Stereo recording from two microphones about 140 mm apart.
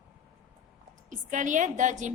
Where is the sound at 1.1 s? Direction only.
65° right (ahead or behind).